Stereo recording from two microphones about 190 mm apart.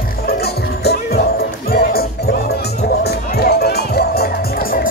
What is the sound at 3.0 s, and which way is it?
Music, 55° left (ahead or behind).